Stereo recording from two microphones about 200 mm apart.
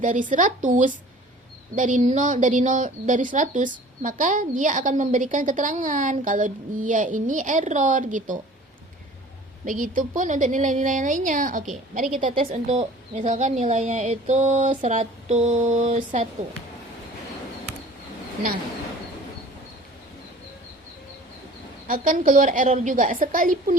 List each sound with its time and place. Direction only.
0.0 s a woman's voice: 40° right (ahead or behind)
9.6 s a woman's voice: 45° right (ahead or behind)
21.8 s a woman's voice: 45° right (ahead or behind)